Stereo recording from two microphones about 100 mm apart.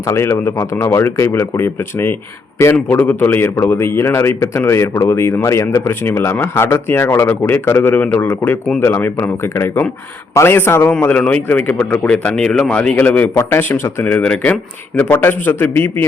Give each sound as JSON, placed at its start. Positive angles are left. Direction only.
{"t": 0.1, "sound": "speech", "side_deg": 25}
{"t": 14.9, "sound": "speech", "side_deg": 20}